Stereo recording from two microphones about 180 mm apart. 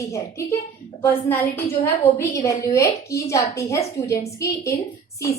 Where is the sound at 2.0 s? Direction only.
15° left (ahead or behind).